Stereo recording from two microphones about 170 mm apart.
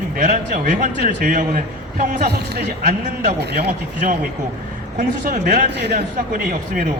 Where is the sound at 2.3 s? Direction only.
75° right (ahead or behind).